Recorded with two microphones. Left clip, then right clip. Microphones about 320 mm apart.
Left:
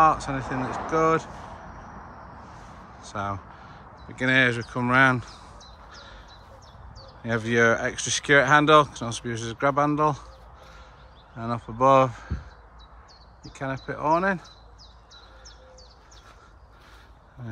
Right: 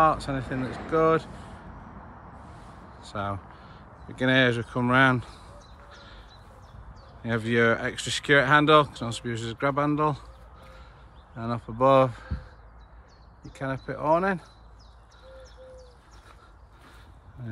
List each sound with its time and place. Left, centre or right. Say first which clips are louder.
0.0 s speech: left 2 dB; centre
3.0 s speech: left 1 dB; centre
5.9 s a sound: left 3 dB; centre
7.2 s speech: left 2 dB; centre
11.3 s speech: left 1 dB; centre
13.5 s speech: left 1 dB; centre